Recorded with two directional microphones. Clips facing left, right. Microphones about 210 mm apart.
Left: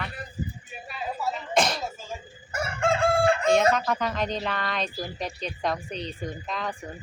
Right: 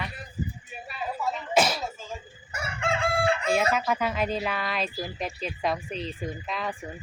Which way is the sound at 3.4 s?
5° right (ahead or behind).